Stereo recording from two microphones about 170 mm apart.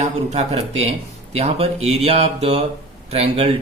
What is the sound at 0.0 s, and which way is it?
Speech, 40° right (ahead or behind).